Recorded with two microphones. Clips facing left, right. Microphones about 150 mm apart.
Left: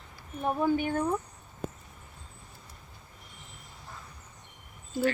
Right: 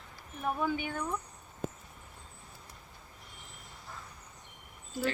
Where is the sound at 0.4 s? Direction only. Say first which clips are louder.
Left 6 dB; 40° left (ahead or behind).